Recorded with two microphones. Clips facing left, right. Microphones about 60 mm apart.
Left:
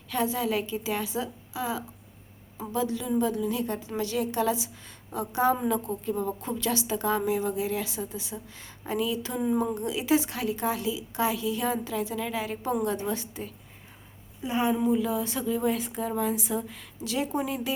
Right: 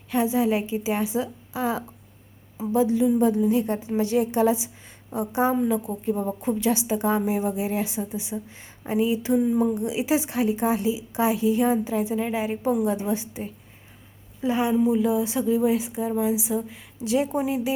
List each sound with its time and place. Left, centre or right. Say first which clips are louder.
0.1 s a woman's voice: right 5 dB; right
5.6 s a woman's voice: right 3 dB; centre
9.4 s a woman's voice: even; centre
9.7 s a woman's voice: right 2 dB; centre
14.9 s a woman's voice: right 5 dB; right